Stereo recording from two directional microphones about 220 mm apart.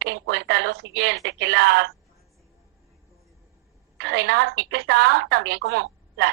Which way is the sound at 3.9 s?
50° right (ahead or behind).